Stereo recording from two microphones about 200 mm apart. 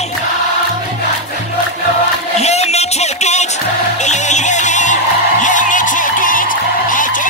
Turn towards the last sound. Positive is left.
turn(degrees=40)  # may be behind; listen again after turning